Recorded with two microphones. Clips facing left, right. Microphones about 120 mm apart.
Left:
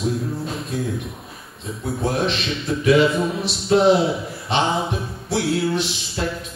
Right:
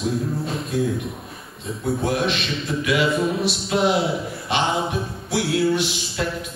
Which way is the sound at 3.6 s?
35° left (ahead or behind).